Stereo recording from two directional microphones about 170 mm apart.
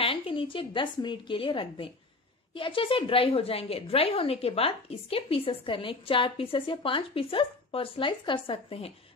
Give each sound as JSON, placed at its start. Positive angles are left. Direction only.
{"t": 0.0, "sound": "a woman's voice", "side_deg": 35}